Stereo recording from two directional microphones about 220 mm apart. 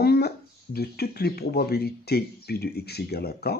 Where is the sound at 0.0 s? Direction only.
45° left (ahead or behind).